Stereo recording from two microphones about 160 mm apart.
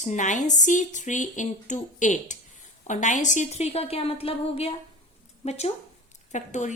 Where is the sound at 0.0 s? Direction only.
50° left (ahead or behind).